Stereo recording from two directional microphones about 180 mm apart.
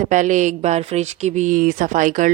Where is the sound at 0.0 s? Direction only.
45° right (ahead or behind).